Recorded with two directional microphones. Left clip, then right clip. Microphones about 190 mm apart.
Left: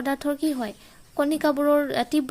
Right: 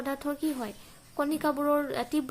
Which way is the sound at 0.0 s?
40° left (ahead or behind).